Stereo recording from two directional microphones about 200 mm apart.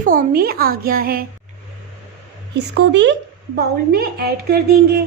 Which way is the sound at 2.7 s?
60° right (ahead or behind).